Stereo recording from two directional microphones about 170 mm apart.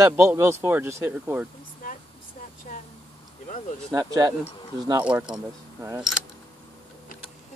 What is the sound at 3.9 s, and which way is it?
Speech, 20° right (ahead or behind).